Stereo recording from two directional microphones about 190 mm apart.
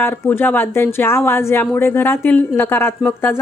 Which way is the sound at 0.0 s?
10° left (ahead or behind).